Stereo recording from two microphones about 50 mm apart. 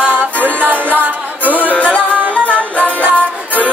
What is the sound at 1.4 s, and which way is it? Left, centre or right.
Music, left.